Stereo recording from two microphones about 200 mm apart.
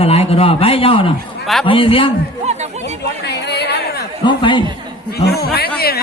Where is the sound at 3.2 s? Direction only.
55° left (ahead or behind).